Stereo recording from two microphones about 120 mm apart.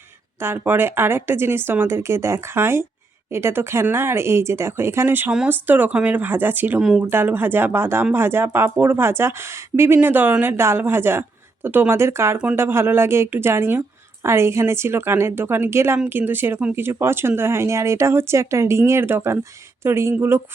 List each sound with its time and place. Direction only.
0.3 s speech: 20° right (ahead or behind)